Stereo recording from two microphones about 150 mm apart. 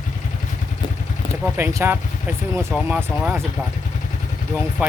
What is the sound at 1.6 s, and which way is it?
Speech, 15° right (ahead or behind).